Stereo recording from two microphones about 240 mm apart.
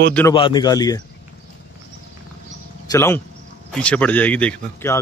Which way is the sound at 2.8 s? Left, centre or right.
Centre.